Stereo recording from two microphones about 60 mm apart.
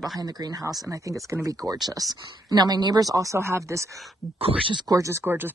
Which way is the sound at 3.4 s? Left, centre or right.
Right.